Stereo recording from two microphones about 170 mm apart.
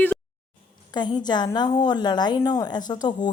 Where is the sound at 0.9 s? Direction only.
25° left (ahead or behind).